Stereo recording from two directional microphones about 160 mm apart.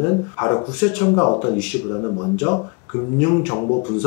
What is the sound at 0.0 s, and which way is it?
Speech, 25° left (ahead or behind).